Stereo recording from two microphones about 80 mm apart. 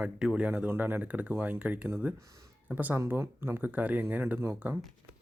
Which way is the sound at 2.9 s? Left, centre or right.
Right.